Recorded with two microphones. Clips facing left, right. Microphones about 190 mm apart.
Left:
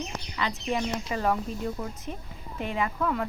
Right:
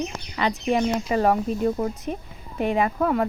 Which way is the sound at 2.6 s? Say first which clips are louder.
Right 7 dB; 65° right (ahead or behind).